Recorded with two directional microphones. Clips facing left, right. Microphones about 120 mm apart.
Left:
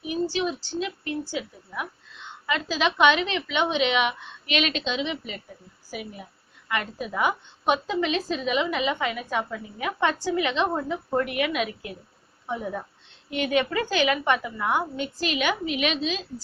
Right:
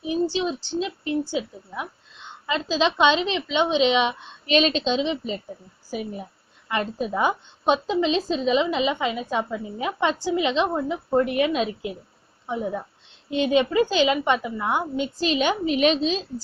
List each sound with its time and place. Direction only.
0.0 s a woman's voice: 25° right (ahead or behind)